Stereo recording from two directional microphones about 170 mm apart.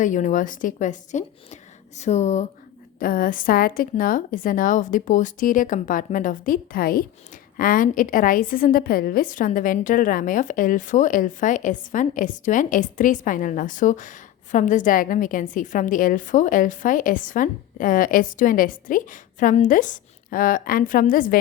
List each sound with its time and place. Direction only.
0.0 s a woman's voice: 50° left (ahead or behind)
3.0 s a woman's voice: 55° left (ahead or behind)